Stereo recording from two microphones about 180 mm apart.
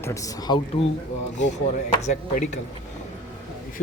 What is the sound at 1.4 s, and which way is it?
Speech, 40° left (ahead or behind).